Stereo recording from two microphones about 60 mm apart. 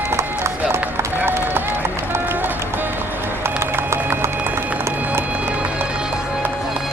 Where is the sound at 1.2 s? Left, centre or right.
Right.